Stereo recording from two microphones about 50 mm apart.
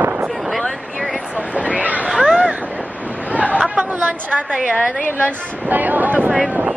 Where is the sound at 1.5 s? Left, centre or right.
Right.